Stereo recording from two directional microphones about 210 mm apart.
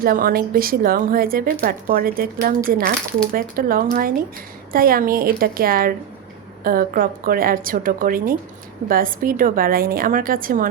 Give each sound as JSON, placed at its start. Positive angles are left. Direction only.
{"t": 0.0, "sound": "a woman's voice", "side_deg": -45}